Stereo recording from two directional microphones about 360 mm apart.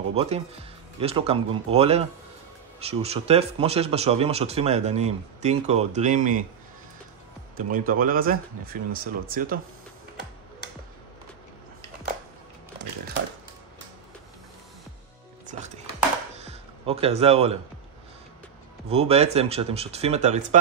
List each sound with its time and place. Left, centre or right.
0.1 s speech: centre
7.7 s speech: right
15.4 s music: centre
16.3 s a sound: centre
18.9 s speech: centre